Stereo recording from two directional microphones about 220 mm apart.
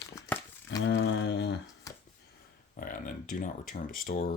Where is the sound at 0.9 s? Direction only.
55° left (ahead or behind).